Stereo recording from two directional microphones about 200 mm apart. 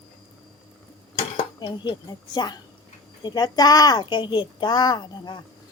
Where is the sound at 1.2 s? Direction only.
25° left (ahead or behind).